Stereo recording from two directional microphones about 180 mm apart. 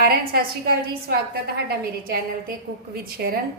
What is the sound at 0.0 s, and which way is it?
A woman's voice, 55° right (ahead or behind).